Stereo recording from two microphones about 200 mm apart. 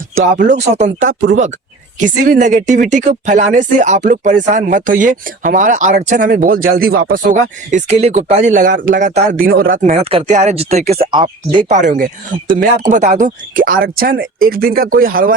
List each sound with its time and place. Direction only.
1.0 s speech: 45° right (ahead or behind); by 11.6 s 25° right (ahead or behind)
11.7 s speech: 40° right (ahead or behind)